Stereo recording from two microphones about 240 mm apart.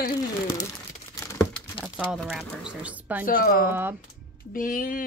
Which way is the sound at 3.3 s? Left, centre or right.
Left.